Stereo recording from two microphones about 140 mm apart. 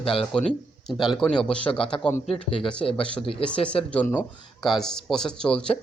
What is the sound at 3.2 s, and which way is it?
Speech, 40° left (ahead or behind).